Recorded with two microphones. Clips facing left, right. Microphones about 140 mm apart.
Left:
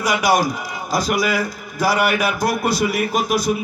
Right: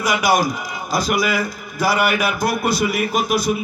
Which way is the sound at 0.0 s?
35° left (ahead or behind).